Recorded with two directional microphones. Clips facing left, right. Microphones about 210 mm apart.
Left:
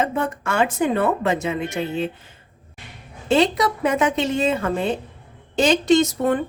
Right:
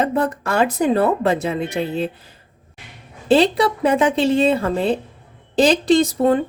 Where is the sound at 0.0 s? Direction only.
35° right (ahead or behind).